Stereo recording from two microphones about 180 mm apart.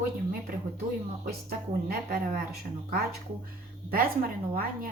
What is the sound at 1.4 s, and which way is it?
Speech, 55° right (ahead or behind).